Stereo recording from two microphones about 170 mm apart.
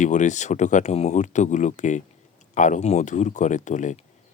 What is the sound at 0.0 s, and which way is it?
Speech, 45° left (ahead or behind).